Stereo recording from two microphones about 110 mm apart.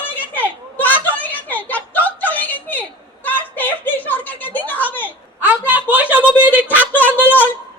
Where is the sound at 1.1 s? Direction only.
15° left (ahead or behind).